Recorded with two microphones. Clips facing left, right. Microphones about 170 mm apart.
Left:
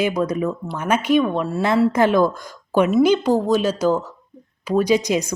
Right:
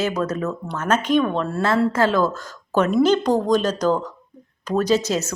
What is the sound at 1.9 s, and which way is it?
A woman's voice, 15° left (ahead or behind).